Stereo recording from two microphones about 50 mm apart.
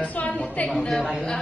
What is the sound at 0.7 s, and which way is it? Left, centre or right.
Speech, centre.